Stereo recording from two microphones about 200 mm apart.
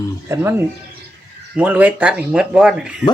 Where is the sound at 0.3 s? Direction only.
15° right (ahead or behind).